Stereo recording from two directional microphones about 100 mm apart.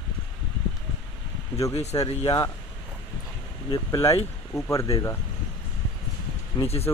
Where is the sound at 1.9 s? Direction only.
50° left (ahead or behind).